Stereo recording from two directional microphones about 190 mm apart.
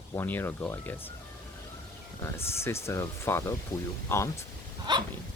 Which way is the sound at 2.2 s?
15° left (ahead or behind).